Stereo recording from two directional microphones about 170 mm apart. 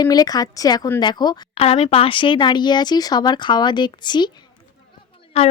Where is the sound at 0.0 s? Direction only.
20° left (ahead or behind).